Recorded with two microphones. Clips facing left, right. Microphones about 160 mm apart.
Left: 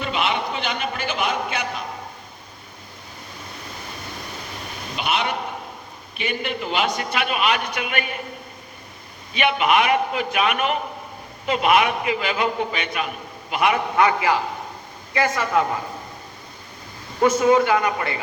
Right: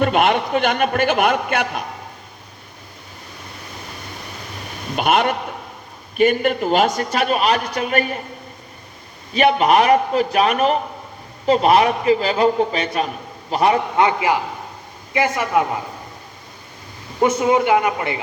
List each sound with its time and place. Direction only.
0.0 s a man's voice: 50° right (ahead or behind)
4.9 s a man's voice: 50° right (ahead or behind)
9.3 s a man's voice: 40° right (ahead or behind); by 15.8 s 20° right (ahead or behind)
17.2 s a man's voice: 20° right (ahead or behind)